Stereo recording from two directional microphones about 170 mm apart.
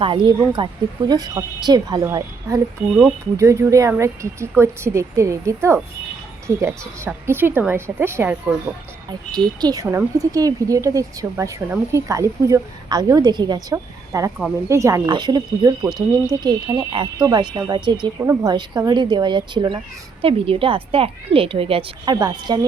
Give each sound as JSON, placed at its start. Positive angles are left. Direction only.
{"t": 0.0, "sound": "speech", "side_deg": -30}
{"t": 9.0, "sound": "a woman's voice", "side_deg": -25}